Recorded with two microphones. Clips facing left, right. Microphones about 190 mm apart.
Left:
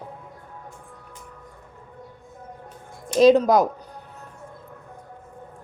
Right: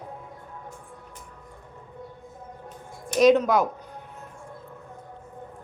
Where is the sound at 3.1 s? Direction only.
30° left (ahead or behind).